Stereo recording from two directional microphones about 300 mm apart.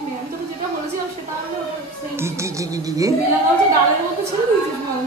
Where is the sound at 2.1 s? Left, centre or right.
Centre.